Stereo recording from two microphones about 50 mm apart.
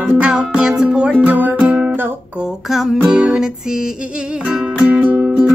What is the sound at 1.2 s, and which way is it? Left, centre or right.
Music, right.